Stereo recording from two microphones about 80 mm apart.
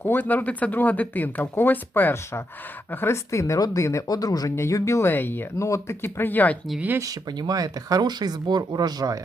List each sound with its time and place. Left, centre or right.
0.0 s speech: left
4.5 s speech: left
6.7 s speech: right
7.0 s speech: right